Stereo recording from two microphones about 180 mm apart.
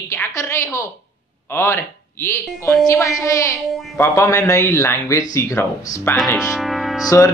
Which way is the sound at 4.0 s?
15° left (ahead or behind).